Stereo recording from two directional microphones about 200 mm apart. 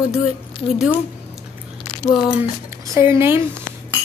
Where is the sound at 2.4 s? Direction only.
15° right (ahead or behind).